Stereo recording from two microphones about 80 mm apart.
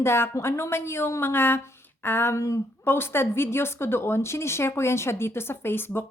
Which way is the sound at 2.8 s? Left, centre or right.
Left.